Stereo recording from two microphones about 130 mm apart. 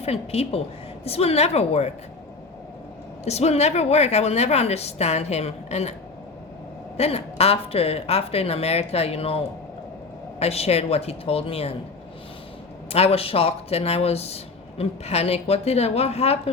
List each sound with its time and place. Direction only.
0.0 s speech: 50° left (ahead or behind)
3.2 s a woman's voice: 55° left (ahead or behind)
6.9 s speech: 50° left (ahead or behind)
10.4 s speech: 50° left (ahead or behind)
12.9 s speech: 50° left (ahead or behind)